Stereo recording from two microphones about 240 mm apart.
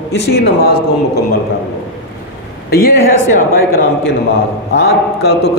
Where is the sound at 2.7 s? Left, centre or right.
Left.